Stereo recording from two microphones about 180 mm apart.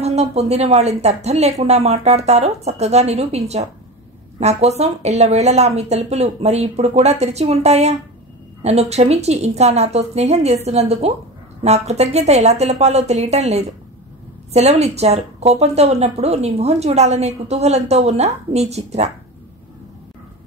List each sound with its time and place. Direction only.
0.0 s a woman's voice: 35° right (ahead or behind)